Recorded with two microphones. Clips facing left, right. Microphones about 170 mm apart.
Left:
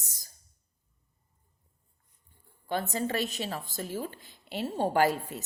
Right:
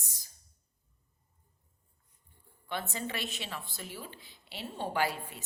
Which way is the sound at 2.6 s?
40° left (ahead or behind).